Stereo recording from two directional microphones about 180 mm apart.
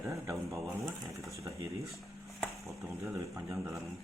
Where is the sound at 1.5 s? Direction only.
15° right (ahead or behind).